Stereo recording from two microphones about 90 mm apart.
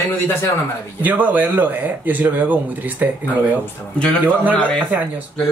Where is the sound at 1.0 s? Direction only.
20° right (ahead or behind).